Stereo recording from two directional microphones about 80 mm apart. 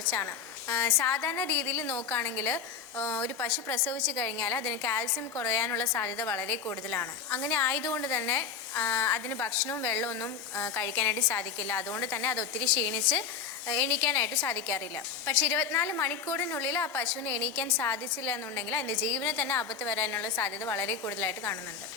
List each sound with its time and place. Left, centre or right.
0.7 s a woman's voice: left